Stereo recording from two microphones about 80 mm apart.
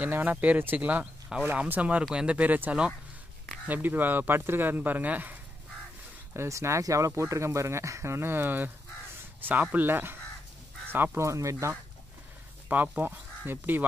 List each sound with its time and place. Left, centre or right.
0.0 s speech: right
6.3 s speech: right
11.2 s speech: right
12.6 s speech: right